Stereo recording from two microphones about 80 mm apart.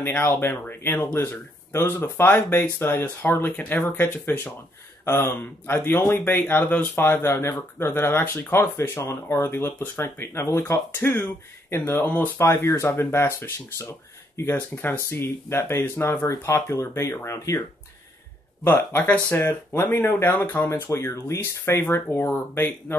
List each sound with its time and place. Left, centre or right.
0.2 s speech: left
19.0 s speech: centre
19.4 s speech: left
20.9 s speech: left